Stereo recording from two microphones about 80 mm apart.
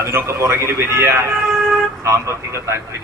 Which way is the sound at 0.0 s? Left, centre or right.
Right.